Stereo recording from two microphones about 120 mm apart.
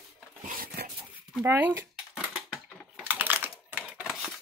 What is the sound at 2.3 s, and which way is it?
Typing, 5° right (ahead or behind).